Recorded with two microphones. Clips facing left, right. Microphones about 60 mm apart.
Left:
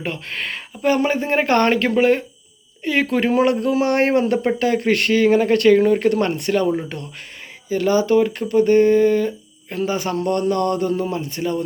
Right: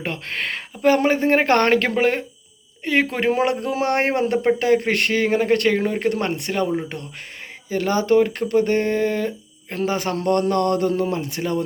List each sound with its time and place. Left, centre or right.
0.0 s speech: right
2.0 s speech: right
7.8 s speech: right